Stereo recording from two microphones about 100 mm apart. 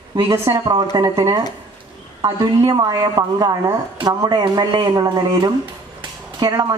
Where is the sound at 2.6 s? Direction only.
45° right (ahead or behind).